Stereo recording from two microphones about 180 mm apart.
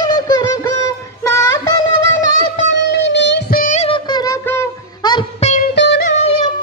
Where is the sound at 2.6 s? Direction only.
80° left; by 3.8 s 50° left (ahead or behind).